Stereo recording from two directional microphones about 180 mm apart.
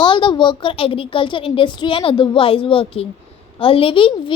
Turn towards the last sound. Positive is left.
turn(degrees=30)  # may be behind; listen again after turning